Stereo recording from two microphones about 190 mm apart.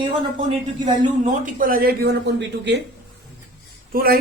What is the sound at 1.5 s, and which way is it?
Speech, 45° right (ahead or behind).